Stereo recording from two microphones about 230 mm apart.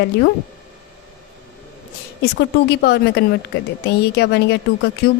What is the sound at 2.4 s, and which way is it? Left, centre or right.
A woman's voice, left.